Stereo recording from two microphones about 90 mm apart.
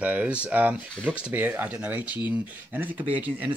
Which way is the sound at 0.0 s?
15° right (ahead or behind).